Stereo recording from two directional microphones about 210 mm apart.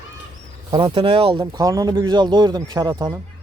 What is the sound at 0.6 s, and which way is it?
Speech, 25° right (ahead or behind).